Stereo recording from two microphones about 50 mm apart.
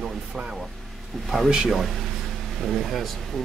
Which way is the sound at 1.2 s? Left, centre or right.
Centre.